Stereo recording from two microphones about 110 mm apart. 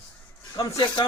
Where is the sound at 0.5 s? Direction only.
45° left (ahead or behind).